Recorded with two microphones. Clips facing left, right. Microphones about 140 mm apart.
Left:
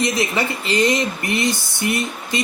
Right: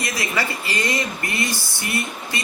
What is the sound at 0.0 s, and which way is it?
Speech, 20° left (ahead or behind).